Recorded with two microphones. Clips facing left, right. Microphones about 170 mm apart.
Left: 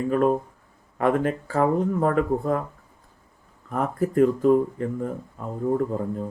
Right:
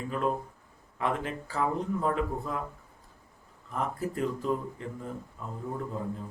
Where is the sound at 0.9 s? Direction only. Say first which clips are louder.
Left 9 dB; 55° left (ahead or behind).